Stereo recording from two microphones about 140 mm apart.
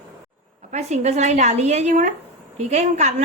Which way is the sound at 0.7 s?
55° right (ahead or behind).